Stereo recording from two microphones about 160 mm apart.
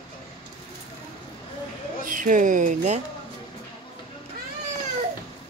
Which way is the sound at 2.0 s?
55° right (ahead or behind).